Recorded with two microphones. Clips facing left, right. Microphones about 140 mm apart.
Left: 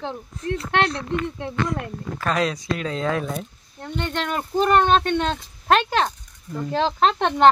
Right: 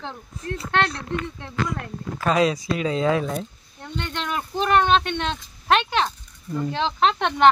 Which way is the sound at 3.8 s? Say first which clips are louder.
Left 4 dB; 40° left (ahead or behind).